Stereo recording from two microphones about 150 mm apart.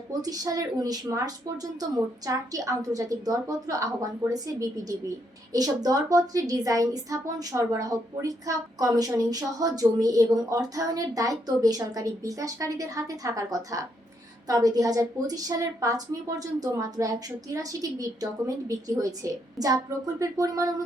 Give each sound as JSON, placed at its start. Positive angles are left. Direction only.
{"t": 0.2, "sound": "a woman's voice", "side_deg": -25}